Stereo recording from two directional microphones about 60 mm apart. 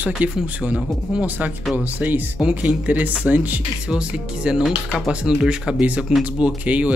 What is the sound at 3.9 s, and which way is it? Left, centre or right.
Speech, centre.